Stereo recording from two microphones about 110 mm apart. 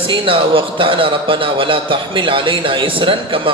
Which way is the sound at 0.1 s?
50° right (ahead or behind).